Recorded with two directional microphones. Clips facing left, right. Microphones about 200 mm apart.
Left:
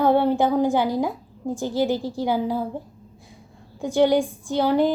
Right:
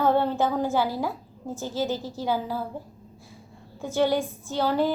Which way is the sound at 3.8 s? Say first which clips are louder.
Left 5 dB; 15° left (ahead or behind).